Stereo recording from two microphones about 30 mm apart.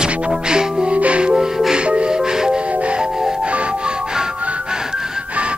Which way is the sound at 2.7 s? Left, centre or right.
Right.